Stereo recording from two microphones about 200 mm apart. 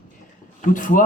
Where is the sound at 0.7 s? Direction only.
40° left (ahead or behind).